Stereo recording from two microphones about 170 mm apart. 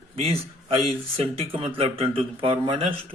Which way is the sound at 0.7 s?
35° right (ahead or behind).